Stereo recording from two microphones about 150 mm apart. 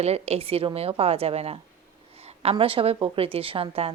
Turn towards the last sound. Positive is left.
turn(degrees=-40)  # may be behind; listen again after turning